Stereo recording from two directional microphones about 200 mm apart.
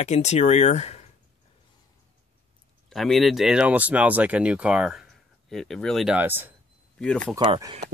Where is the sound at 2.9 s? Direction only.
Centre (ahead or behind).